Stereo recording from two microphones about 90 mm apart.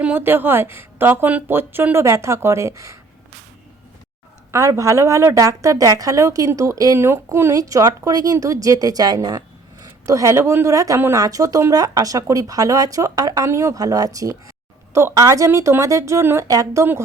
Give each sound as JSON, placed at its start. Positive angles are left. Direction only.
{"t": 0.0, "sound": "a woman's voice", "side_deg": -20}
{"t": 4.5, "sound": "speech", "side_deg": -35}
{"t": 7.0, "sound": "speech", "side_deg": -30}
{"t": 9.8, "sound": "speech", "side_deg": -40}